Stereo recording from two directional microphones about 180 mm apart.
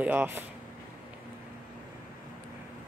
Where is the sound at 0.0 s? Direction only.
10° right (ahead or behind).